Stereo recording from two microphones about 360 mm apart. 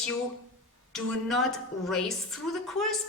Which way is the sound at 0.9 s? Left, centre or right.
Centre.